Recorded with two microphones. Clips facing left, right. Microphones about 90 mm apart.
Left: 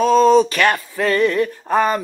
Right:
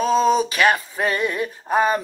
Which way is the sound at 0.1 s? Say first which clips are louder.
Left 5 dB; 15° right (ahead or behind).